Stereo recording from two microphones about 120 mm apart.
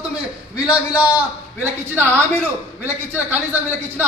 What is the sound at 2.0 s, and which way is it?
A woman's voice, 20° right (ahead or behind).